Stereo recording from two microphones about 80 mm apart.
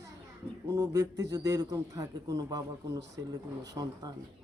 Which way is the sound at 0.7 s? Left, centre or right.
Right.